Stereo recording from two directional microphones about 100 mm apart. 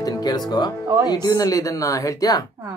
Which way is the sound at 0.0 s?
45° left (ahead or behind).